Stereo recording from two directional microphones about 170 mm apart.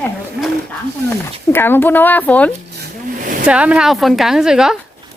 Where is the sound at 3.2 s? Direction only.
50° right (ahead or behind).